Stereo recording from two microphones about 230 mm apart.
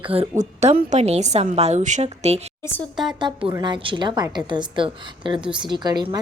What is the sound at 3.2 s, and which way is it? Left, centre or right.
A woman's voice, centre.